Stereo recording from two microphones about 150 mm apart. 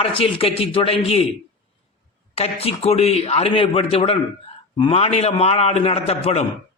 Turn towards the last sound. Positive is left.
turn(degrees=45)  # may be behind; listen again after turning